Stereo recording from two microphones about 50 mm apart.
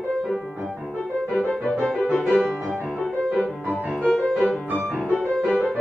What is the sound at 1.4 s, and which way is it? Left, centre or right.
Music, centre.